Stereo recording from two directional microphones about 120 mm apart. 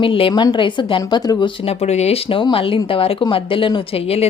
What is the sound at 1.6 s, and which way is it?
Speech, 65° left (ahead or behind).